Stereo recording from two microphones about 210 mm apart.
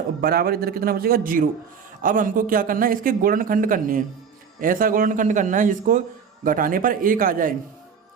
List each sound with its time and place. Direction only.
0.2 s a man's voice: 45° right (ahead or behind)